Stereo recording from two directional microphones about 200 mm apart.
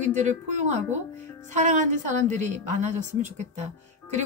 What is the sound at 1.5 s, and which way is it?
Speech, 40° right (ahead or behind).